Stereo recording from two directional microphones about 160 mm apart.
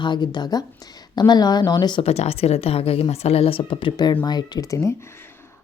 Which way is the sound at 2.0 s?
40° left (ahead or behind).